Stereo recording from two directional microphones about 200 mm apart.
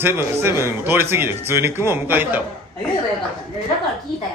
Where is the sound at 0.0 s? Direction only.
10° right (ahead or behind).